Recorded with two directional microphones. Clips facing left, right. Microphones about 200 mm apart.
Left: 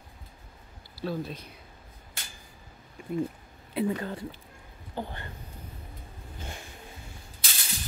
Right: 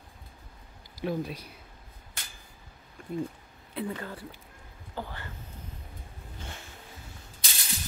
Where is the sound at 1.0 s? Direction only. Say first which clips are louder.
Right 1 dB; 10° right (ahead or behind).